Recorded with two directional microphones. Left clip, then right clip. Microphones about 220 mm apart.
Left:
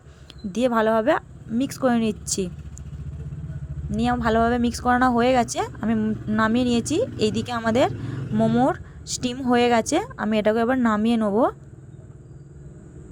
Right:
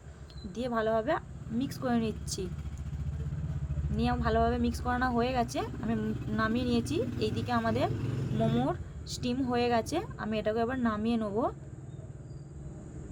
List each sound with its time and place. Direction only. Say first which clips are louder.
0.5 s speech: left 10 dB; 35° left (ahead or behind)
3.9 s speech: left 8 dB; 35° left (ahead or behind)
8.4 s speech: left 11 dB; 25° left (ahead or behind)